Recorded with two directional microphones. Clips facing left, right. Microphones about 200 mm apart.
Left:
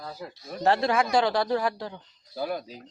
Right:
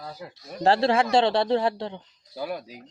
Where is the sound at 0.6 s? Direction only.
30° right (ahead or behind).